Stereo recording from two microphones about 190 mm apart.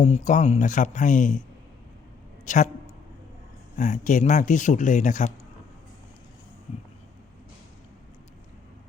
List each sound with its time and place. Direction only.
0.0 s speech: 40° left (ahead or behind)
2.4 s a sound: 40° left (ahead or behind)
3.8 s speech: 40° left (ahead or behind)